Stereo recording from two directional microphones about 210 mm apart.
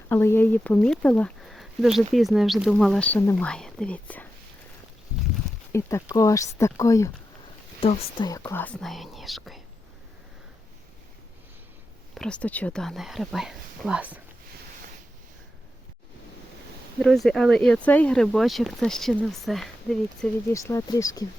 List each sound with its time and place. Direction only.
0.1 s speech: 10° left (ahead or behind)
5.7 s speech: 15° left (ahead or behind)
7.8 s speech: 25° left (ahead or behind)
8.3 s speech: 10° left (ahead or behind)
12.1 s speech: 5° left (ahead or behind)
17.0 s speech: centre (ahead or behind)
20.5 s speech: 15° left (ahead or behind)